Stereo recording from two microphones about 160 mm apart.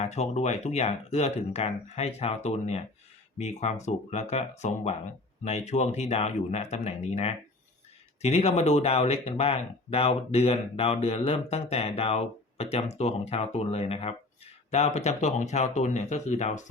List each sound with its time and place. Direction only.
0.0 s speech: 45° left (ahead or behind)